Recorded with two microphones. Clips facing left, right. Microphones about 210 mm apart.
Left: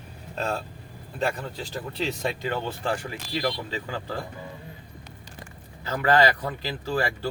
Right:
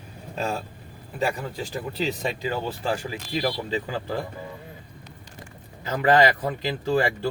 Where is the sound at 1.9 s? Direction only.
Centre (ahead or behind).